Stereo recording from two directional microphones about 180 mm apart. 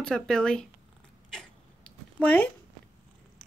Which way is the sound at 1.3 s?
5° left (ahead or behind).